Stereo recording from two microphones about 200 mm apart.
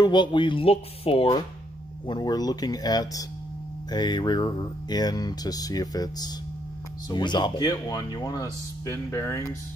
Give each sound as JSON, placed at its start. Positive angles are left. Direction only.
{"t": 0.0, "sound": "speech", "side_deg": 25}